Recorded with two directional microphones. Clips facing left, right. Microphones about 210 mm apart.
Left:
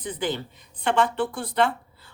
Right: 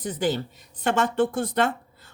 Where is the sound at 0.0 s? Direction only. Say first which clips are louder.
Right 3 dB; 40° right (ahead or behind).